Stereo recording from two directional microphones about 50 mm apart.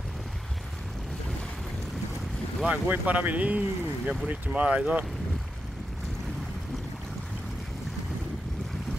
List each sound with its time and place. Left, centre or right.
2.7 s speech: right